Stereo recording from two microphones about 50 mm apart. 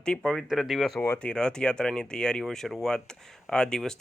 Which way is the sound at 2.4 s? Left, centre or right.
Centre.